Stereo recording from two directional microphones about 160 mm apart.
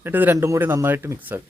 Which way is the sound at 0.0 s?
10° right (ahead or behind).